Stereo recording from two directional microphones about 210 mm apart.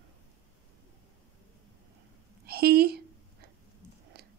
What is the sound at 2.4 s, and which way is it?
Speech, 50° right (ahead or behind).